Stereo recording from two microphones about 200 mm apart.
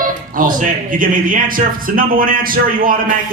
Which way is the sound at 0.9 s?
45° right (ahead or behind).